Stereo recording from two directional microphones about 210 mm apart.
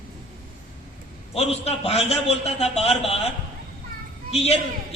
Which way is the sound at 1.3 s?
30° left (ahead or behind).